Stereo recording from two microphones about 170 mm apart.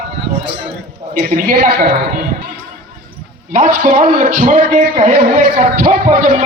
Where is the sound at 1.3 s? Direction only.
50° right (ahead or behind).